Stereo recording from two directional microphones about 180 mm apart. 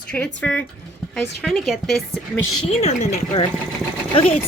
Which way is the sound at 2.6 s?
35° left (ahead or behind).